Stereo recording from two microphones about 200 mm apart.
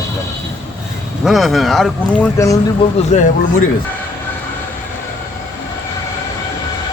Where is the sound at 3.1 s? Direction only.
35° left (ahead or behind).